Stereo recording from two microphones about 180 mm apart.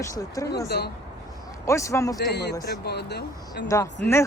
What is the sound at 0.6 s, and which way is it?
Speech, 65° left (ahead or behind).